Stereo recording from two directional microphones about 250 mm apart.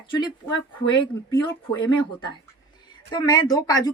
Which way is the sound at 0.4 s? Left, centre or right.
Centre.